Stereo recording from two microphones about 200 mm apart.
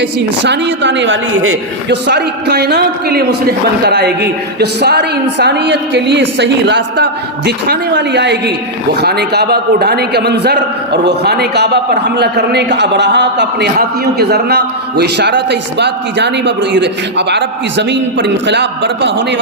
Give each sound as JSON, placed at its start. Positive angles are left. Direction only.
{"t": 0.0, "sound": "a man's voice", "side_deg": -60}
{"t": 2.0, "sound": "a man's voice", "side_deg": -55}